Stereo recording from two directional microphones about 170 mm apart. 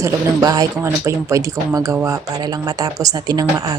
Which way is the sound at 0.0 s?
20° right (ahead or behind).